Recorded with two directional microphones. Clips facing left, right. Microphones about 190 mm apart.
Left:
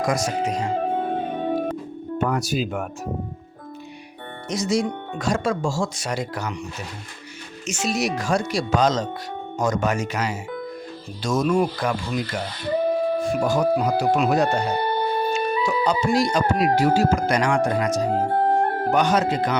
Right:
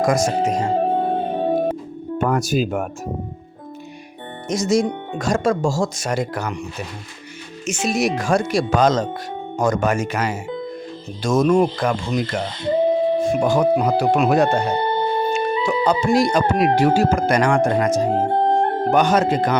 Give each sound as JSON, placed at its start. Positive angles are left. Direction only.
{"t": 0.0, "sound": "speech", "side_deg": -45}
{"t": 0.7, "sound": "music", "side_deg": -35}
{"t": 2.1, "sound": "speech", "side_deg": -50}
{"t": 4.4, "sound": "speech", "side_deg": -45}
{"t": 7.7, "sound": "speech", "side_deg": -55}
{"t": 12.4, "sound": "music", "side_deg": -20}
{"t": 13.7, "sound": "speech", "side_deg": -55}
{"t": 14.7, "sound": "music", "side_deg": -25}
{"t": 16.0, "sound": "speech", "side_deg": -50}
{"t": 18.0, "sound": "music", "side_deg": -25}
{"t": 18.9, "sound": "speech", "side_deg": -50}